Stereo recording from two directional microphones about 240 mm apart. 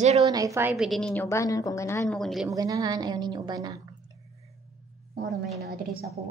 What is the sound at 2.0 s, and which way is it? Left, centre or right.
Speech, centre.